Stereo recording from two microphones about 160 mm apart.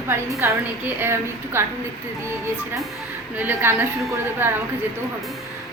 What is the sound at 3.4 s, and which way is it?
A woman's voice, 10° right (ahead or behind).